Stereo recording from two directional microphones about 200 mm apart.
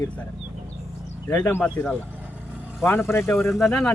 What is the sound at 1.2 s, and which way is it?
Speech, 10° left (ahead or behind).